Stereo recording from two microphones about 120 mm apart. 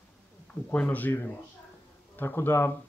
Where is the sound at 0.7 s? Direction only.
15° left (ahead or behind).